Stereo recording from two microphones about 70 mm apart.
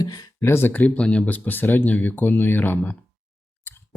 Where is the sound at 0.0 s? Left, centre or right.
Left.